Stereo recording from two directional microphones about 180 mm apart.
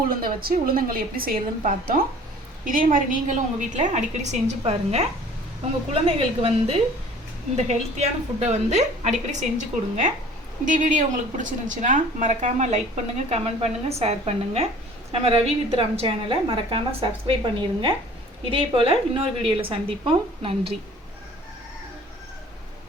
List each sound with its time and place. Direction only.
0.1 s a woman's voice: 55° right (ahead or behind); by 20.7 s 30° right (ahead or behind)